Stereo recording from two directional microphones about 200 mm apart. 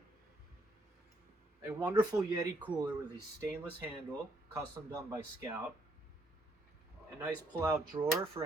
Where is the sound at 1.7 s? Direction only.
10° right (ahead or behind).